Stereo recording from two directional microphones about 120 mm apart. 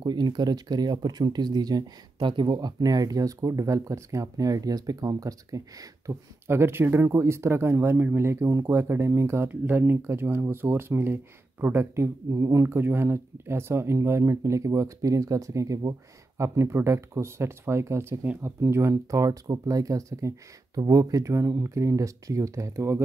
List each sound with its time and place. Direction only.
0.0 s speech: 35° right (ahead or behind)